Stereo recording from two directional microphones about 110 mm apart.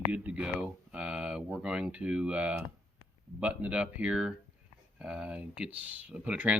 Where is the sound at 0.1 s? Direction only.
15° right (ahead or behind).